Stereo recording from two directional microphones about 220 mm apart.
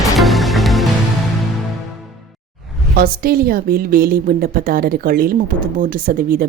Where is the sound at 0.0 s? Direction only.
Centre (ahead or behind).